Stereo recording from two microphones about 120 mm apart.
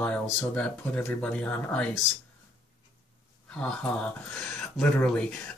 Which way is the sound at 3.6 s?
5° left (ahead or behind).